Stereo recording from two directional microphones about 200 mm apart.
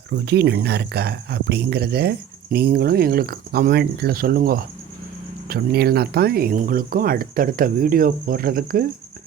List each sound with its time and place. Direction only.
0.1 s speech: 55° right (ahead or behind)